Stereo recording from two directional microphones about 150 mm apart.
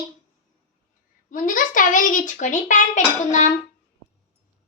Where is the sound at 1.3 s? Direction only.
60° left (ahead or behind).